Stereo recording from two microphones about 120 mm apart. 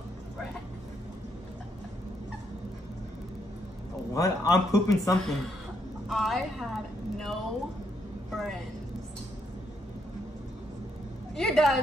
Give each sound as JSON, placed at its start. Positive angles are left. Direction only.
{"t": 4.1, "sound": "speech", "side_deg": 30}
{"t": 5.2, "sound": "a woman's voice", "side_deg": 0}
{"t": 6.0, "sound": "a sound", "side_deg": 0}
{"t": 11.3, "sound": "a woman's voice", "side_deg": 5}